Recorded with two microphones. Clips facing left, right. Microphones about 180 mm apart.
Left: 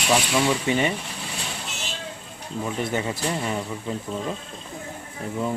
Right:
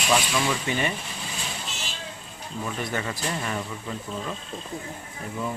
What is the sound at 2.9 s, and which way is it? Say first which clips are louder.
Speech: left 4 dB; 20° left (ahead or behind).